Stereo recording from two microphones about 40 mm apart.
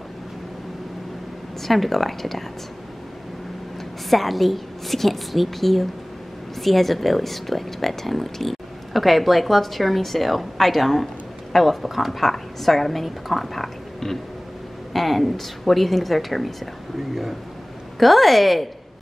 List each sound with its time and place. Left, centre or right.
1.6 s speech: centre
4.1 s speech: centre